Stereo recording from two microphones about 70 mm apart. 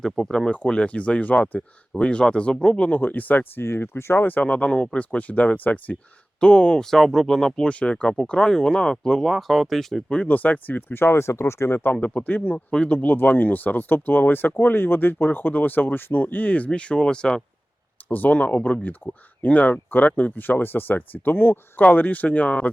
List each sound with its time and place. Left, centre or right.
0.0 s speech: centre; by 4.3 s left
4.3 s speech: left; by 10.0 s centre
10.1 s speech: centre; by 11.8 s left
11.8 s speech: left
18.1 s speech: left